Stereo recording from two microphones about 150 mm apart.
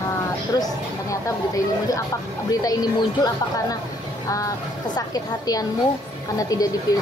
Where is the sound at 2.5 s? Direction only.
25° left (ahead or behind).